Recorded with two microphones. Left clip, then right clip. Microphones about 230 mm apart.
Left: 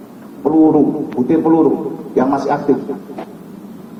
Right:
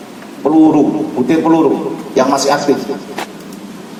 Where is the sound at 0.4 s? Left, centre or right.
Right.